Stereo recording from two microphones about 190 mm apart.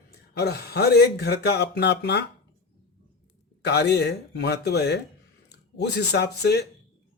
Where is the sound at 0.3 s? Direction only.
60° left (ahead or behind).